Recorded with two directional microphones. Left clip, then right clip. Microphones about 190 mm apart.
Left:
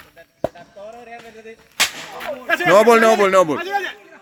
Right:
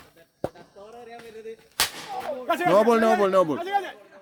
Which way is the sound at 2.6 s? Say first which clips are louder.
Left 8 dB; 15° left (ahead or behind).